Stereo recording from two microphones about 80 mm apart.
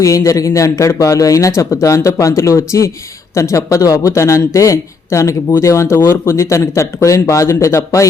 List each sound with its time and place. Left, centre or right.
0.0 s speech: left